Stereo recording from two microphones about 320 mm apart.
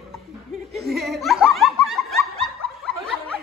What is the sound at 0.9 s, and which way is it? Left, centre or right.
Snicker, centre.